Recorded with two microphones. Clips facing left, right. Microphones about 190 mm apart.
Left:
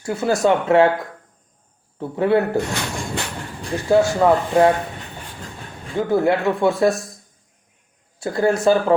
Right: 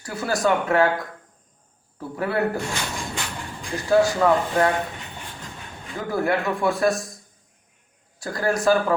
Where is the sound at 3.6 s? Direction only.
25° left (ahead or behind).